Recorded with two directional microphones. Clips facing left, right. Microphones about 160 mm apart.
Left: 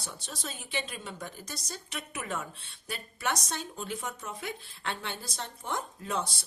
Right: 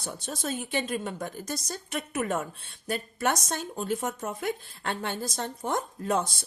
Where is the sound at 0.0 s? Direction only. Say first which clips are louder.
Right 7 dB; 50° right (ahead or behind).